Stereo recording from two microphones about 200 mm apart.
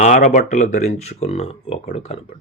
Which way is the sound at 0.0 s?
35° left (ahead or behind).